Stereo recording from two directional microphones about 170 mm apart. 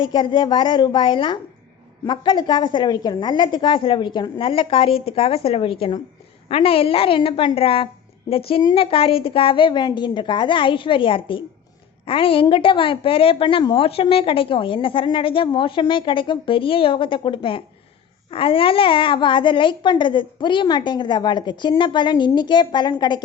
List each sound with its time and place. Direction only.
0.0 s a child's voice: 30° left (ahead or behind)